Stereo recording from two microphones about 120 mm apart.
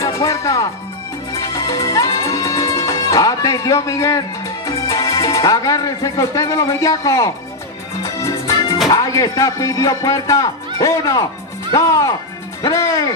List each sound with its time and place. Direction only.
0.0 s speech: 25° left (ahead or behind)
1.3 s music: 30° left (ahead or behind)
4.6 s speech: 25° left (ahead or behind)
8.0 s music: 25° left (ahead or behind)
8.8 s speech: 30° left (ahead or behind)